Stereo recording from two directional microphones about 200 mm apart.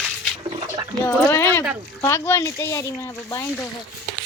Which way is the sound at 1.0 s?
15° left (ahead or behind).